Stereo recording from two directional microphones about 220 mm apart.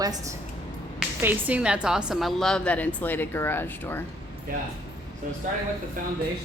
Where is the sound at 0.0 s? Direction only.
15° right (ahead or behind); by 4.0 s 10° left (ahead or behind).